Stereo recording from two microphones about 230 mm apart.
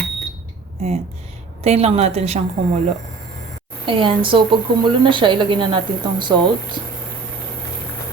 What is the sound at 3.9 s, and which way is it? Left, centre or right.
Speech, right.